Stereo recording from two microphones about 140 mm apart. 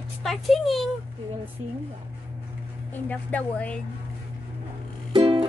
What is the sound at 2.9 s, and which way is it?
Speech, 10° left (ahead or behind).